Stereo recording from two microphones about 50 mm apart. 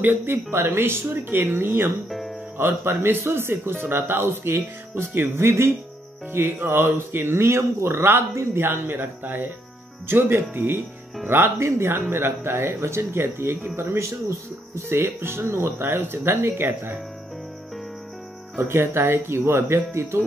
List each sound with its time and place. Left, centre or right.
0.0 s speech: right
2.0 s speech: centre
2.5 s speech: right
14.9 s speech: right
18.7 s speech: right